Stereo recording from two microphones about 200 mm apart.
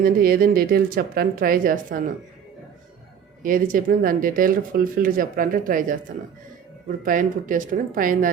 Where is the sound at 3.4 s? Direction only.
45° right (ahead or behind).